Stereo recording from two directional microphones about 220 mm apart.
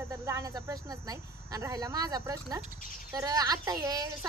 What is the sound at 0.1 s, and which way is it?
Speech, 15° right (ahead or behind).